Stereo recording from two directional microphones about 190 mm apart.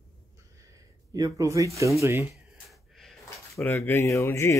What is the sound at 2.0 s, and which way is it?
Speech, 15° right (ahead or behind).